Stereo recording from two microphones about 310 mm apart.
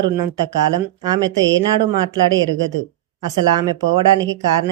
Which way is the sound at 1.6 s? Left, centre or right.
Centre.